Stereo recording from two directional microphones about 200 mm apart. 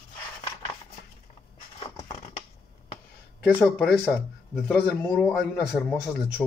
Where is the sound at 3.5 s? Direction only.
Centre (ahead or behind).